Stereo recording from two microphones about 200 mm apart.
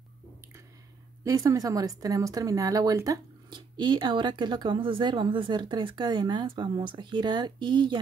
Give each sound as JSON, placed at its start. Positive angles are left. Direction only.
{"t": 1.2, "sound": "speech", "side_deg": -15}